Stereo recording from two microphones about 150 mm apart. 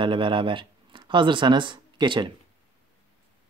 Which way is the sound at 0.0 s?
35° right (ahead or behind).